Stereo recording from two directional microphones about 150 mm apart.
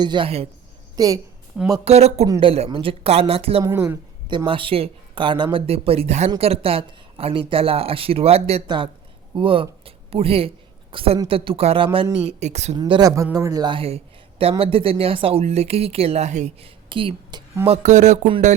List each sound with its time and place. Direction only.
0.0 s speech: 30° right (ahead or behind)
0.9 s a woman's voice: 25° right (ahead or behind)
1.8 s speech: 45° right (ahead or behind)
3.8 s speech: 30° right (ahead or behind)
8.6 s a man's voice: 30° right (ahead or behind); by 12.7 s 50° right (ahead or behind)
12.7 s speech: 30° right (ahead or behind)
17.7 s speech: 55° right (ahead or behind)